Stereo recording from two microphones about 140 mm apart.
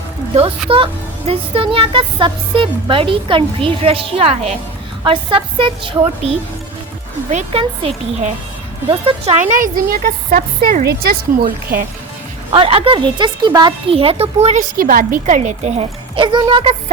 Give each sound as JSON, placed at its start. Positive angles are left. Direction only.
{"t": 1.3, "sound": "speech", "side_deg": -40}
{"t": 7.3, "sound": "speech", "side_deg": -60}
{"t": 7.8, "sound": "a child's voice", "side_deg": -45}
{"t": 9.4, "sound": "speech", "side_deg": -70}
{"t": 12.5, "sound": "speech", "side_deg": -40}
{"t": 14.6, "sound": "a child's voice", "side_deg": -85}